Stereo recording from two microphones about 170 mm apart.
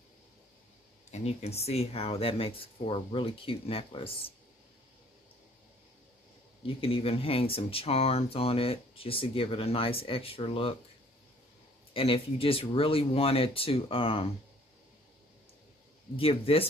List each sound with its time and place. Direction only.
1.1 s speech: 40° left (ahead or behind)
6.6 s speech: 35° left (ahead or behind)
11.9 s speech: 35° left (ahead or behind)
16.2 s speech: 35° left (ahead or behind)